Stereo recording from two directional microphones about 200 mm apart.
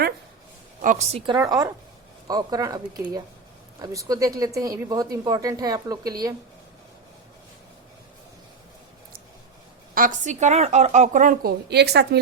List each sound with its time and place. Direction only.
0.8 s a woman's voice: 40° right (ahead or behind)
1.3 s speech: 20° right (ahead or behind)
9.9 s speech: 40° right (ahead or behind)